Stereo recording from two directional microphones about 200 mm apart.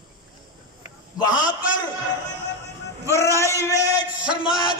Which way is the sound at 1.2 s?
20° left (ahead or behind).